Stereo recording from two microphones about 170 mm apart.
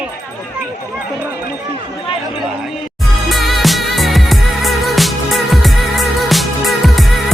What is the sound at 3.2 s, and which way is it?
Music, centre (ahead or behind).